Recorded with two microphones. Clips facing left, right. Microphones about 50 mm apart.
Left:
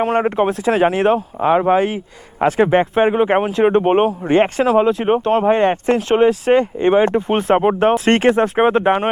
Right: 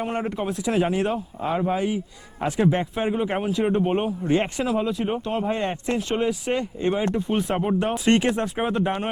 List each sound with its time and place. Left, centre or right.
0.0 s speech: left
7.8 s speech: left
8.0 s speech: left